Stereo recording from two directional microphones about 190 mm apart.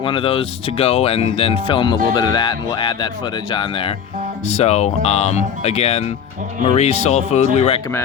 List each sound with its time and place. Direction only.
0.0 s speech: 25° left (ahead or behind)